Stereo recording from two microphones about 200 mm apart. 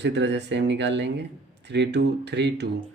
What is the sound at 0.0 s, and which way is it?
Speech, 60° right (ahead or behind).